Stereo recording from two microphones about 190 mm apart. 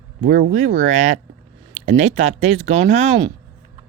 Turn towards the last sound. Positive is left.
turn(degrees=-35)  # may be behind; listen again after turning